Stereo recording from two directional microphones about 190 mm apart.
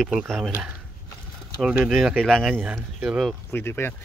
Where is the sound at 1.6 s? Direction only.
Centre (ahead or behind).